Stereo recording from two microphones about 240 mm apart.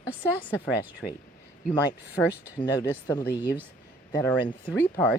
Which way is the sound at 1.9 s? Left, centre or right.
Centre.